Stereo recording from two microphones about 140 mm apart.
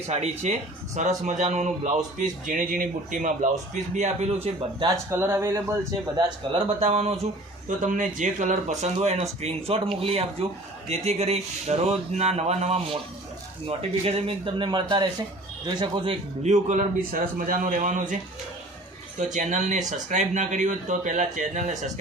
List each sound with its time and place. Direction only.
0.1 s a man's voice: 50° right (ahead or behind)
2.1 s a man's voice: 70° right (ahead or behind)
3.9 s a man's voice: 55° right (ahead or behind)
4.9 s speech: 15° right (ahead or behind)
6.1 s speech: 40° right (ahead or behind)
7.8 s a man's voice: 65° right (ahead or behind)
8.8 s speech: 50° right (ahead or behind); by 16.1 s 35° right (ahead or behind)
16.4 s a man's voice: 60° right (ahead or behind)
19.2 s a man's voice: 55° right (ahead or behind)